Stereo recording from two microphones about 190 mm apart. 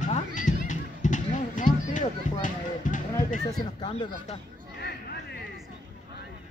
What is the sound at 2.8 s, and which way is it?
Run, 40° left (ahead or behind).